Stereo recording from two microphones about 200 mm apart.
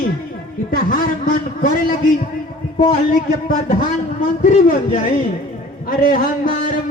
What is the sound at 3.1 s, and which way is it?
Speech, 40° left (ahead or behind).